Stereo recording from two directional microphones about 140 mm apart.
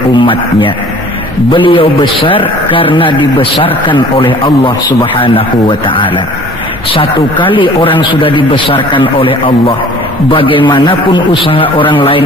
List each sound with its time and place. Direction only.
1.5 s a man's voice: 40° left (ahead or behind)